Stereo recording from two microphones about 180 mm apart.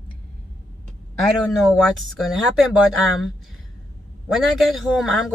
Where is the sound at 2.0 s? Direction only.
Centre (ahead or behind).